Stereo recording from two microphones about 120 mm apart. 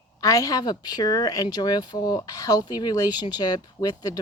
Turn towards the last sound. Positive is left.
turn(degrees=35)  # may be behind; listen again after turning